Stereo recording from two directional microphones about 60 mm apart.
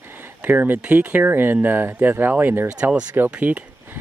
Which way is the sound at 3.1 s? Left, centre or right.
Right.